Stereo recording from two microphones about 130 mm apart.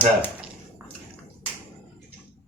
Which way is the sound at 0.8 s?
15° right (ahead or behind).